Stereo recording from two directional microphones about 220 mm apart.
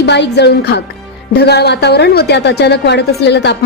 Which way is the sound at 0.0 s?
50° left (ahead or behind).